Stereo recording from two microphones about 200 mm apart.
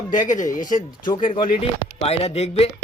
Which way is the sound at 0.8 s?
25° left (ahead or behind).